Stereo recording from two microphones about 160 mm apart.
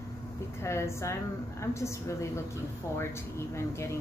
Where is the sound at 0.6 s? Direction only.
15° left (ahead or behind).